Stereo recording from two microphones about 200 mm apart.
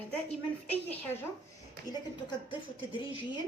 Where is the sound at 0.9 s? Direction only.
10° left (ahead or behind).